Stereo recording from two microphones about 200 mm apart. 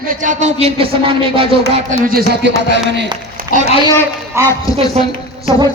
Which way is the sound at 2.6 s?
60° right (ahead or behind).